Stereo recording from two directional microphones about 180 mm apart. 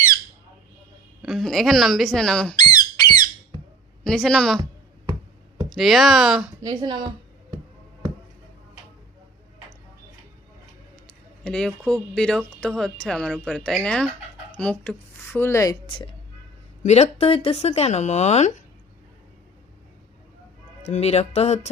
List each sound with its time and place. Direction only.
1.2 s speech: centre (ahead or behind)
2.6 s squeak: 20° left (ahead or behind)
4.0 s speech: 5° left (ahead or behind)
5.6 s speech: centre (ahead or behind)
6.6 s a woman's voice: 20° right (ahead or behind)
11.4 s speech: 5° left (ahead or behind)
16.8 s speech: 40° left (ahead or behind)
20.8 s speech: 40° left (ahead or behind)